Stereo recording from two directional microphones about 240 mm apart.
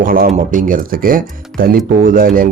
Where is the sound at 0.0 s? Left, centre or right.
Right.